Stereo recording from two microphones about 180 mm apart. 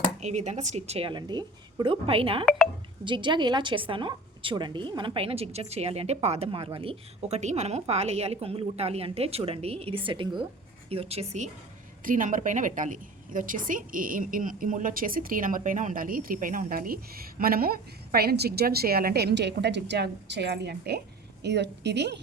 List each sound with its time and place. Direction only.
0.2 s a woman's voice: 40° right (ahead or behind); by 22.2 s 70° right (ahead or behind)